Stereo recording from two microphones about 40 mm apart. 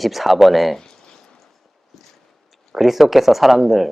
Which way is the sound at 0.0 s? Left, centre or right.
Centre.